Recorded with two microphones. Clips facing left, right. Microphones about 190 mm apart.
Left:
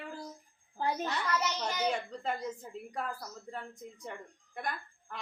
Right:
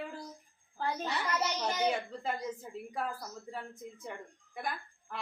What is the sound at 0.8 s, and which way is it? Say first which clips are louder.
Speech: left 2 dB; 15° left (ahead or behind).